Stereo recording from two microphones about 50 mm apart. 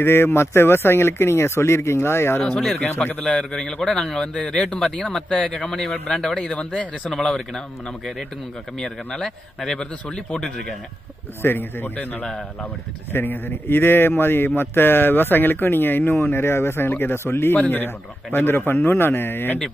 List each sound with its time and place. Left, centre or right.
0.0 s a man's voice: left
2.4 s speech: centre
2.8 s a man's voice: left
3.3 s speech: centre
7.3 s speech: centre
9.6 s speech: centre
10.0 s speech: centre
11.4 s a man's voice: left
17.6 s a man's voice: left